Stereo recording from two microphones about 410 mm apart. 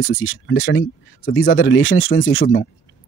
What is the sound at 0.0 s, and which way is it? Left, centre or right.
Speech, left.